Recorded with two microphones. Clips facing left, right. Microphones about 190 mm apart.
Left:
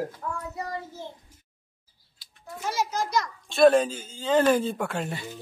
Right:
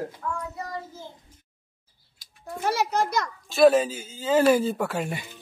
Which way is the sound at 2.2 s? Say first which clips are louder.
Right 5 dB; 60° right (ahead or behind).